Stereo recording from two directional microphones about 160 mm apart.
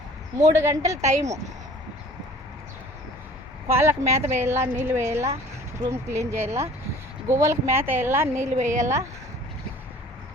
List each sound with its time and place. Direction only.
0.3 s speech: 15° right (ahead or behind)
3.7 s speech: 15° right (ahead or behind)